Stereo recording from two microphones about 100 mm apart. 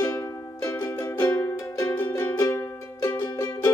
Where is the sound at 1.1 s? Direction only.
25° left (ahead or behind).